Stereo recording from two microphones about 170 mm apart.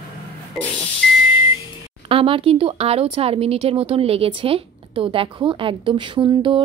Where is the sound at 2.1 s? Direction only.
30° right (ahead or behind).